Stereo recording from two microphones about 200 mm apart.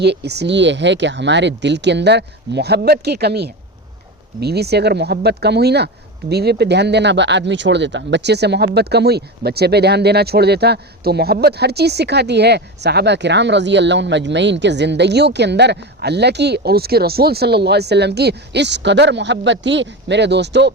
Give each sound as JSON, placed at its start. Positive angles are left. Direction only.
{"t": 0.0, "sound": "speech", "side_deg": -55}